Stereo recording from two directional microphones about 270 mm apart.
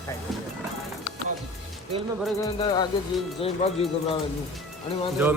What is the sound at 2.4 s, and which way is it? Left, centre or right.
Music, centre.